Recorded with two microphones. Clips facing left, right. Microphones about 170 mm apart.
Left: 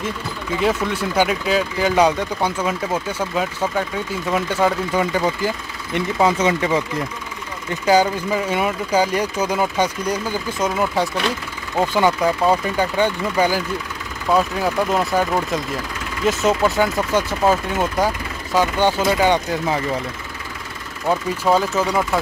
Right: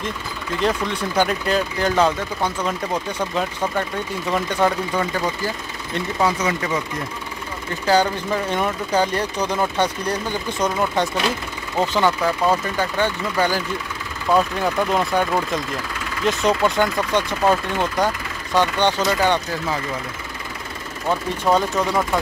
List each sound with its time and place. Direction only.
0.6 s speech: 10° left (ahead or behind)
5.9 s speech: 25° left (ahead or behind)
7.8 s speech: 10° left (ahead or behind)
14.3 s speech: centre (ahead or behind)
21.5 s speech: 5° left (ahead or behind)